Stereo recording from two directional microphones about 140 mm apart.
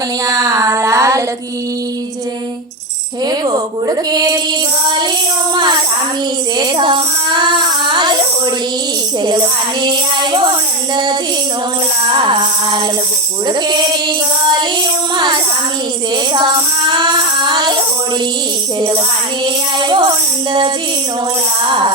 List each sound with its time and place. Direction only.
0.3 s a sound: 25° right (ahead or behind)
3.2 s a sound: 25° right (ahead or behind)
6.6 s music: 35° right (ahead or behind)
9.8 s music: 35° right (ahead or behind)
10.9 s tambourine: 35° right (ahead or behind)
12.0 s music: 35° right (ahead or behind)
16.3 s music: 35° right (ahead or behind)
19.8 s music: 35° right (ahead or behind)
21.7 s music: 35° right (ahead or behind)